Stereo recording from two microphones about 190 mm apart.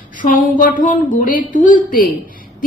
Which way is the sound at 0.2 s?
45° left (ahead or behind).